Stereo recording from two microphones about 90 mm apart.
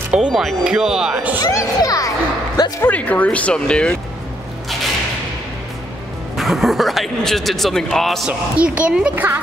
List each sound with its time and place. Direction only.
0.1 s speech: 5° right (ahead or behind)
1.4 s a child's voice: 40° left (ahead or behind)
2.8 s speech: 15° left (ahead or behind)
6.3 s speech: 5° right (ahead or behind)
8.3 s speech: 15° right (ahead or behind)